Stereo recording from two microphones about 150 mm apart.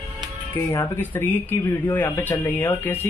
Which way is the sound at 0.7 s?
15° left (ahead or behind).